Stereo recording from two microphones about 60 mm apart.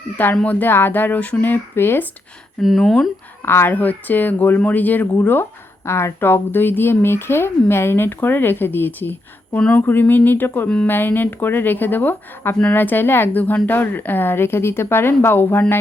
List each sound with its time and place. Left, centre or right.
0.4 s speech: left
2.6 s speech: centre
3.4 s speech: left
3.7 s speech: left